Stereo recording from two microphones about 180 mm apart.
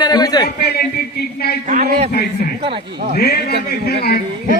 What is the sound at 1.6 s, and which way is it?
Speech, 45° right (ahead or behind).